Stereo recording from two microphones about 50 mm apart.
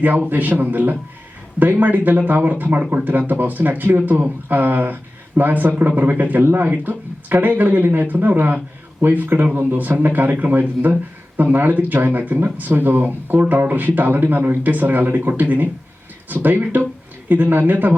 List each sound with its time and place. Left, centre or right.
0.3 s speech: right